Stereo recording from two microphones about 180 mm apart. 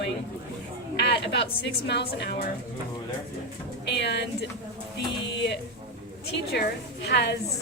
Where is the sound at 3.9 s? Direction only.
70° left (ahead or behind).